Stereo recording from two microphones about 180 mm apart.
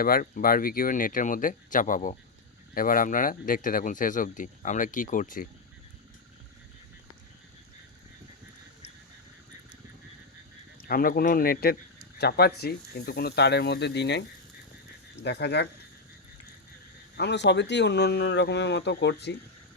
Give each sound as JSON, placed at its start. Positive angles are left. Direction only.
{"t": 0.0, "sound": "speech", "side_deg": 55}
{"t": 10.8, "sound": "speech", "side_deg": 55}
{"t": 17.2, "sound": "speech", "side_deg": 70}